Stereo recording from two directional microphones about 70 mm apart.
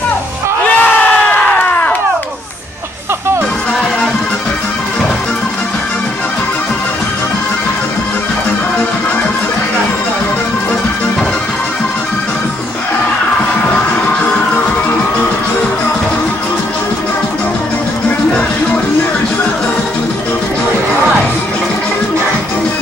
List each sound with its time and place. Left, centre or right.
0.7 s crowd: left